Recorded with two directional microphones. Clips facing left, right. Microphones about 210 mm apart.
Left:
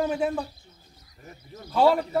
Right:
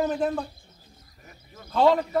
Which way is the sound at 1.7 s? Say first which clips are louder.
Even; 5° left (ahead or behind).